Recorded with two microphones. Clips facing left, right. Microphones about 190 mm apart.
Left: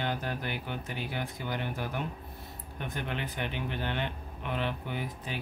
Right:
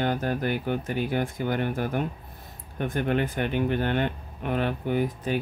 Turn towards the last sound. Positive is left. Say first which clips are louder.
# right 11 dB
turn(degrees=-45)  # may be behind; listen again after turning